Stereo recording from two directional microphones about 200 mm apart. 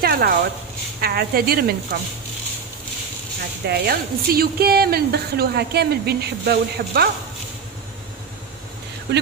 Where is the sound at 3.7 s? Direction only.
50° right (ahead or behind).